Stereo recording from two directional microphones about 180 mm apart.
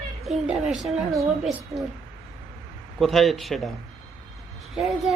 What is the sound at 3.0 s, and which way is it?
Child singing, centre (ahead or behind).